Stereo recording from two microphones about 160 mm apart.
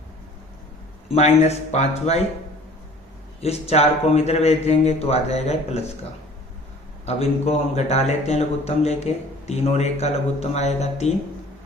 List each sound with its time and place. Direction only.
1.0 s a man's voice: 40° left (ahead or behind)
3.4 s a man's voice: 40° left (ahead or behind)
7.0 s speech: 40° left (ahead or behind)